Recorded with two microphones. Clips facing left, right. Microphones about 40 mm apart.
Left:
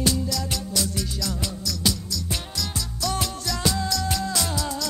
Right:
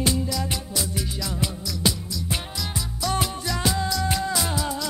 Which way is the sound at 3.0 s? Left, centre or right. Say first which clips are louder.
Right 2 dB; centre.